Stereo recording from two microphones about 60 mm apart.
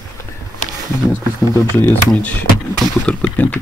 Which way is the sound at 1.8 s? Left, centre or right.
Left.